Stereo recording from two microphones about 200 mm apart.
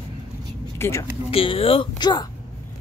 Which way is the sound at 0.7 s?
15° left (ahead or behind).